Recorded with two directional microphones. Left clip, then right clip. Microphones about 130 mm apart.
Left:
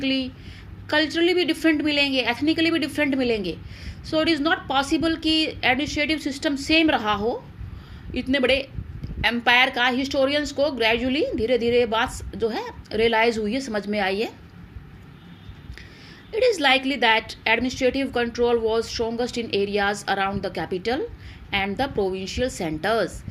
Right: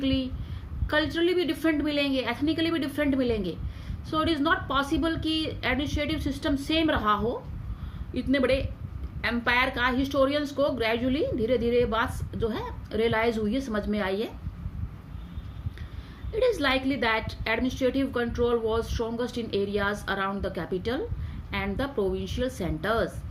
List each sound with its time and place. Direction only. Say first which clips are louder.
0.0 s a woman's voice: left 4 dB; 25° left (ahead or behind)
16.3 s a woman's voice: left 6 dB; 25° left (ahead or behind)